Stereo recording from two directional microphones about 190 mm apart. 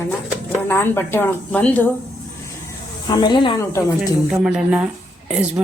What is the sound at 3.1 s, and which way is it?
Speech, 25° left (ahead or behind).